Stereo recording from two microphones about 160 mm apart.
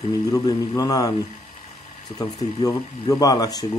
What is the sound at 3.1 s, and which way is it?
Mantra, 20° left (ahead or behind).